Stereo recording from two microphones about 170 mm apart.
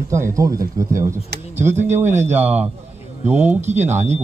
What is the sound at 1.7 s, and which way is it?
Speech, 45° right (ahead or behind).